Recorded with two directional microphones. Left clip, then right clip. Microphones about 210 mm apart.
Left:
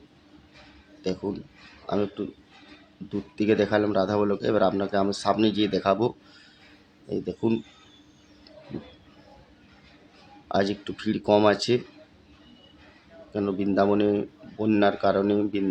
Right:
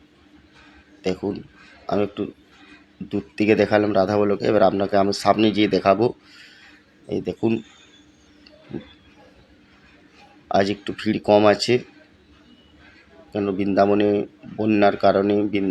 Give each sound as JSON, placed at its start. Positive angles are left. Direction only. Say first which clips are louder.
{"t": 1.0, "sound": "a man's voice", "louder": "right 5 dB", "side_deg": -5}
{"t": 10.5, "sound": "speech", "louder": "right 5 dB", "side_deg": -5}
{"t": 13.3, "sound": "speech", "louder": "right 5 dB", "side_deg": 0}